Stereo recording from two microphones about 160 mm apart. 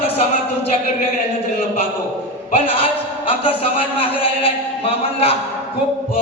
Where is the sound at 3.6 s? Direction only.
35° left (ahead or behind).